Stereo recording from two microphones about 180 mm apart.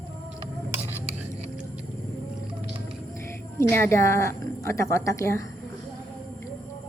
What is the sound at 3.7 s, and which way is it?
A woman's voice, 15° left (ahead or behind).